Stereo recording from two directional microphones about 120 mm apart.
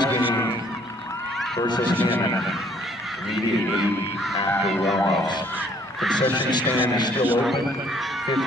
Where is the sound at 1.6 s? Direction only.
35° left (ahead or behind).